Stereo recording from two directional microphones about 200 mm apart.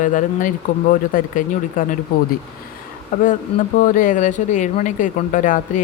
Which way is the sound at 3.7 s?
40° left (ahead or behind).